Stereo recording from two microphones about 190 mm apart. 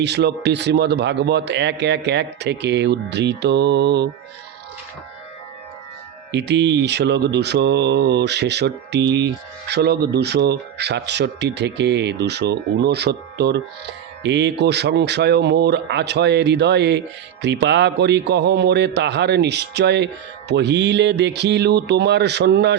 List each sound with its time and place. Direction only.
0.0 s speech: 60° right (ahead or behind)
6.3 s speech: 65° right (ahead or behind)